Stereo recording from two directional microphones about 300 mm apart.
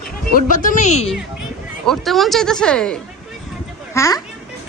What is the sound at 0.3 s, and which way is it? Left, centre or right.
Speech, left.